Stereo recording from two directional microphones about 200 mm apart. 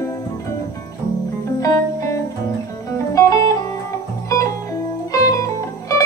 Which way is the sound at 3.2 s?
15° left (ahead or behind).